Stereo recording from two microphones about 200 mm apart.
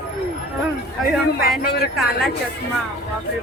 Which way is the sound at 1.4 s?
50° left (ahead or behind).